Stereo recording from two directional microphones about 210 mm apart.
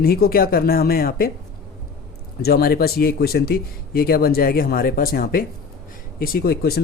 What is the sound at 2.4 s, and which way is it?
Speech, 45° left (ahead or behind).